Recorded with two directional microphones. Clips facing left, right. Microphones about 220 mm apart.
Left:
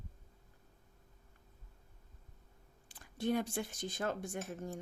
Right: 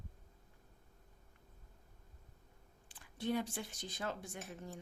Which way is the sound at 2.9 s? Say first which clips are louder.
Left 3 dB; 45° left (ahead or behind).